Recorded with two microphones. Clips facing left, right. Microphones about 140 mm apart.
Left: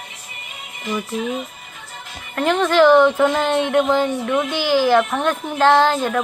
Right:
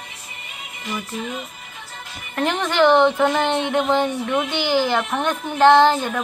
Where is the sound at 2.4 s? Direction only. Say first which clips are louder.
Left 4 dB; 5° left (ahead or behind).